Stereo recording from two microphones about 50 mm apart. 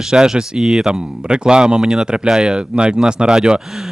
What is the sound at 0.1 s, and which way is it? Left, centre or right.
Speech, centre.